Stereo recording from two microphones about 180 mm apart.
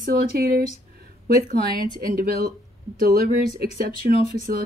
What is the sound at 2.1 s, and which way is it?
Speech, 55° right (ahead or behind).